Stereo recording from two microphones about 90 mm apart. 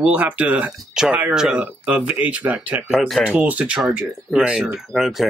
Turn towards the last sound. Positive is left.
turn(degrees=-5)  # may be behind; listen again after turning